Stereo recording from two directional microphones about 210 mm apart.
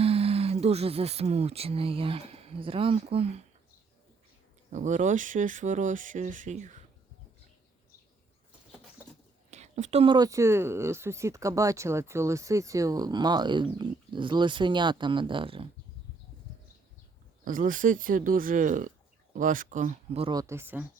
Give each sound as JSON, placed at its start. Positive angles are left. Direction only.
{"t": 0.0, "sound": "speech", "side_deg": -30}
{"t": 4.7, "sound": "speech", "side_deg": -35}
{"t": 9.5, "sound": "speech", "side_deg": -35}
{"t": 17.4, "sound": "speech", "side_deg": -40}